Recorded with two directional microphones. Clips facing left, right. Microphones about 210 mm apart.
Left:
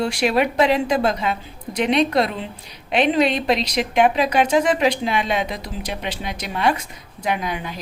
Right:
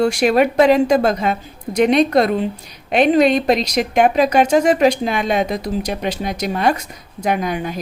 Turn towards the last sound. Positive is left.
turn(degrees=-45)  # may be behind; listen again after turning